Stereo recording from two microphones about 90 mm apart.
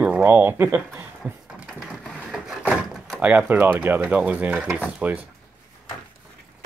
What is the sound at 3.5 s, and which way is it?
Speech, 20° right (ahead or behind).